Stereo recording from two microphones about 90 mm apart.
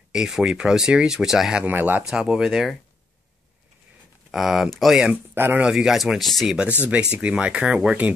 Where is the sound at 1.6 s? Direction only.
20° right (ahead or behind).